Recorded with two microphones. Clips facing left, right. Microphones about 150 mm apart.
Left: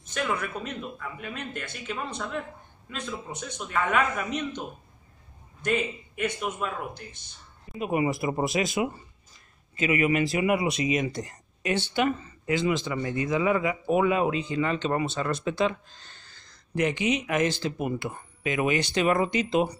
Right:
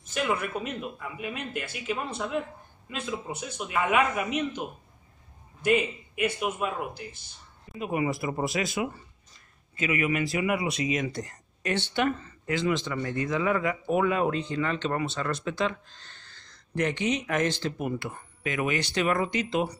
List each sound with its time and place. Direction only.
0.1 s a man's voice: 5° right (ahead or behind)
7.7 s speech: 20° left (ahead or behind)
17.7 s speech: 20° left (ahead or behind)